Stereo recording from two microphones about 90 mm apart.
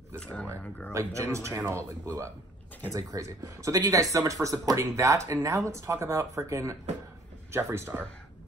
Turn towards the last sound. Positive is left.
turn(degrees=-25)  # may be behind; listen again after turning